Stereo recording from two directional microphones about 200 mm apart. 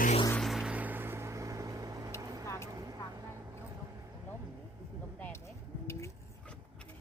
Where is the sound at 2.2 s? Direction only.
15° right (ahead or behind).